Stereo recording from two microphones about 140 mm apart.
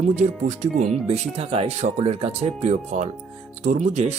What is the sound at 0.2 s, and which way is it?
Speech, 60° right (ahead or behind).